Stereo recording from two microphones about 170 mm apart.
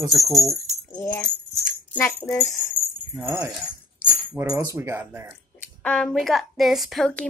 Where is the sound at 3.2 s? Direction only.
15° right (ahead or behind).